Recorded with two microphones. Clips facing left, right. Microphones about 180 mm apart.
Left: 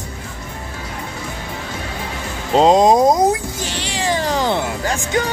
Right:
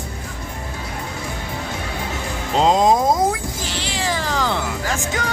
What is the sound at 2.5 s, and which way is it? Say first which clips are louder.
Speech: left 4 dB; 20° left (ahead or behind).